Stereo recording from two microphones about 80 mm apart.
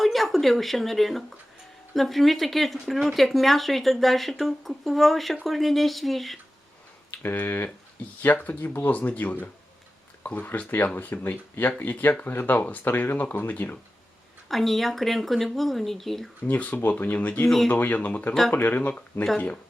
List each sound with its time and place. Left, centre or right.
0.0 s speech: centre
7.2 s speech: left
14.4 s speech: centre
16.4 s speech: centre
17.4 s speech: centre
17.7 s speech: left